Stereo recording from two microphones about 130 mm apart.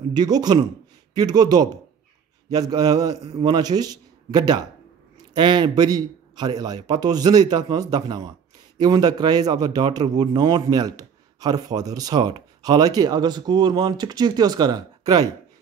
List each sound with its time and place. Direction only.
0.1 s a man's voice: 30° right (ahead or behind)